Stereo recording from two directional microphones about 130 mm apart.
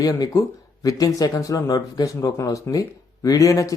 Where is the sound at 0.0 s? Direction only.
25° left (ahead or behind).